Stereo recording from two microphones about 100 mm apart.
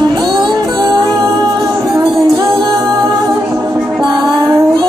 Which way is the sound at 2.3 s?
45° right (ahead or behind).